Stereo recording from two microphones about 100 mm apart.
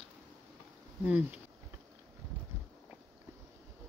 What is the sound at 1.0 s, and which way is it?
Speech, 15° right (ahead or behind).